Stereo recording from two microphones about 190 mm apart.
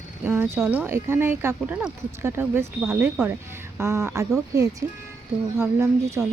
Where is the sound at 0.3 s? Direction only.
10° right (ahead or behind).